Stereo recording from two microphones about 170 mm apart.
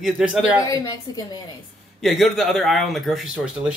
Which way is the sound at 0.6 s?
20° left (ahead or behind).